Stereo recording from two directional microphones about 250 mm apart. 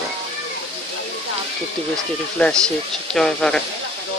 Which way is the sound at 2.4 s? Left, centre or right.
Centre.